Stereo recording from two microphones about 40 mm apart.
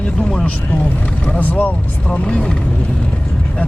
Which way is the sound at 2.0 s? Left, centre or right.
Left.